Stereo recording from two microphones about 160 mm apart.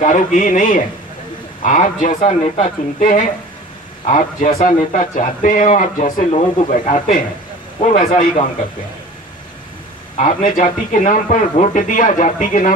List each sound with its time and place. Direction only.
0.0 s speech: 55° left (ahead or behind)
10.1 s speech: 55° left (ahead or behind)